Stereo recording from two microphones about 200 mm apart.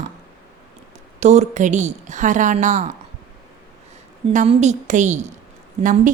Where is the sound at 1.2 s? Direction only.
35° right (ahead or behind).